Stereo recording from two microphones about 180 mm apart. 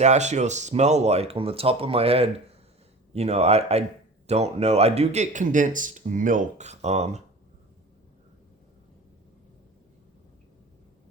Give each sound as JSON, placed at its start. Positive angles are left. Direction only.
{"t": 0.0, "sound": "speech", "side_deg": -40}